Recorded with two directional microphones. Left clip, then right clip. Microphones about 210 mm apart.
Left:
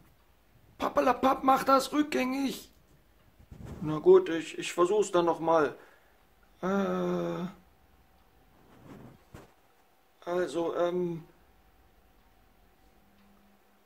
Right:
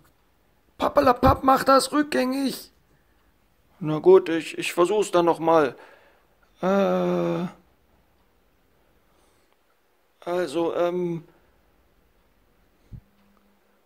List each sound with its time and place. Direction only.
0.7 s speech: 30° right (ahead or behind)
3.8 s speech: 35° right (ahead or behind)
10.2 s speech: 40° right (ahead or behind)